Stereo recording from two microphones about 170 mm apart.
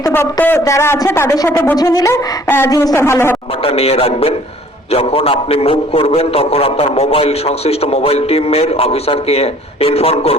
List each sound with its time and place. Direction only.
0.0 s a woman's voice: 15° left (ahead or behind)
3.7 s a man's voice: 35° left (ahead or behind)